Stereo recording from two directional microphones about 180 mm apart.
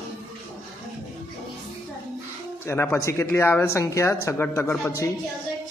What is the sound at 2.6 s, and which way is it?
Speech, 10° left (ahead or behind).